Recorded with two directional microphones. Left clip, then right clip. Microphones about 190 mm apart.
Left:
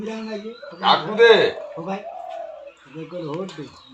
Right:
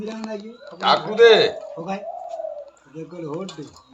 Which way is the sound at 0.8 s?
25° right (ahead or behind).